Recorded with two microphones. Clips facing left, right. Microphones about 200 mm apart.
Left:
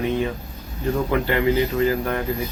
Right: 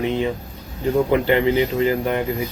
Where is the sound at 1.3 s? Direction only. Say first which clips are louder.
Right 2 dB; 20° right (ahead or behind).